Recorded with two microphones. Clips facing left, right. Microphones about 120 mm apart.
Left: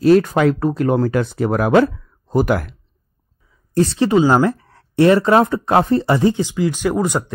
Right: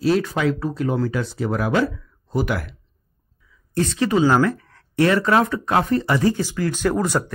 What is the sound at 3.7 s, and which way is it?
Speech, 30° left (ahead or behind).